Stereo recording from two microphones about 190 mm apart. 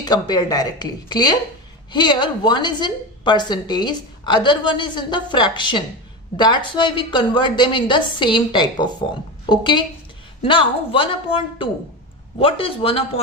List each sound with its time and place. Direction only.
0.0 s a woman's voice: 20° left (ahead or behind)